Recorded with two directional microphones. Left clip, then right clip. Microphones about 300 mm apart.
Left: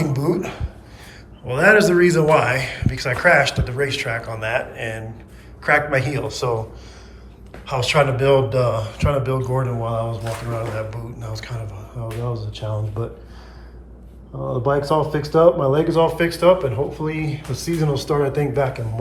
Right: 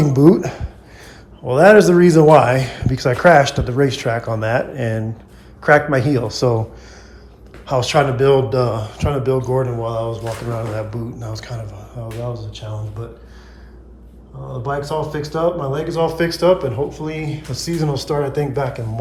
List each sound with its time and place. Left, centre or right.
0.0 s a sound: centre
1.5 s speech: centre
7.6 s speech: centre
14.5 s speech: centre